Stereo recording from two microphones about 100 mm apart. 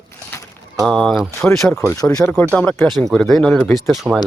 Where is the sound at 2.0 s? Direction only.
10° left (ahead or behind).